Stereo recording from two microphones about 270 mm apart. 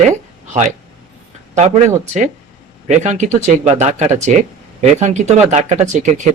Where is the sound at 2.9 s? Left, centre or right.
Right.